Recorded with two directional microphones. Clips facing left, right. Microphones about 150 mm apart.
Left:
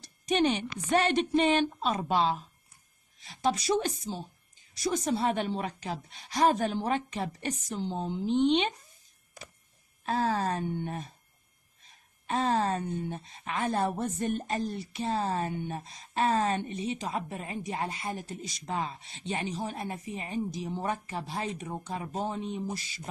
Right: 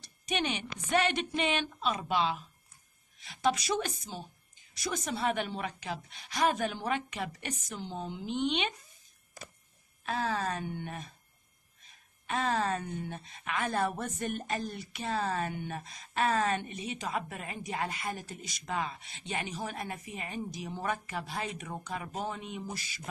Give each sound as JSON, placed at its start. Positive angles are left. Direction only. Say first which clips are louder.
{"t": 0.0, "sound": "a woman's voice", "louder": "left 7 dB", "side_deg": 40}
{"t": 10.0, "sound": "a woman's voice", "louder": "left 4 dB", "side_deg": 35}
{"t": 12.3, "sound": "a woman's voice", "louder": "left 3 dB", "side_deg": 30}